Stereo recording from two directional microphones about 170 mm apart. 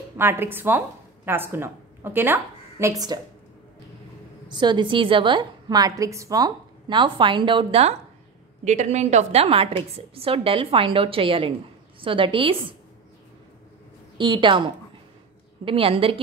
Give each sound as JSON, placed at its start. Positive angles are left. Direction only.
{"t": 0.2, "sound": "a woman's voice", "side_deg": -15}
{"t": 4.5, "sound": "a woman's voice", "side_deg": -25}
{"t": 8.6, "sound": "a woman's voice", "side_deg": -45}
{"t": 14.1, "sound": "a woman's voice", "side_deg": -30}